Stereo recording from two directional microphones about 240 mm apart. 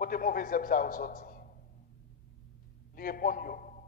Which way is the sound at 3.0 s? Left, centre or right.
Left.